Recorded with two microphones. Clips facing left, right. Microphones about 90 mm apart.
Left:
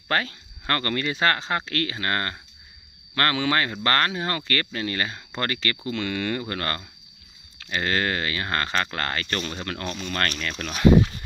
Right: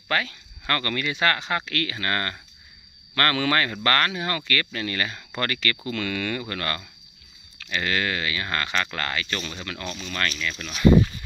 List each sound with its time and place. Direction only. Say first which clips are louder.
0.1 s speech: left 1 dB; 35° left (ahead or behind); by 10.9 s 55° left (ahead or behind)